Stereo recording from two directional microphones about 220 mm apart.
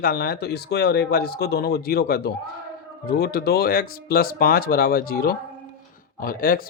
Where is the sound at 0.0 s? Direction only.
45° left (ahead or behind).